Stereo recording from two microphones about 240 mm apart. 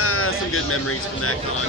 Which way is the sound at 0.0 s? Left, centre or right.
Left.